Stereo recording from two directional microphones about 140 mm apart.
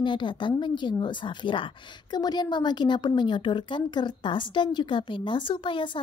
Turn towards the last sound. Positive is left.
turn(degrees=35)  # may be behind; listen again after turning